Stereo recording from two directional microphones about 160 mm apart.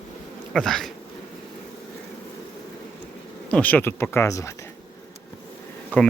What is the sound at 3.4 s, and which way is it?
Speech, 10° left (ahead or behind).